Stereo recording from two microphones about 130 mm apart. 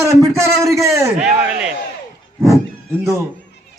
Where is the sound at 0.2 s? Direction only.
20° right (ahead or behind).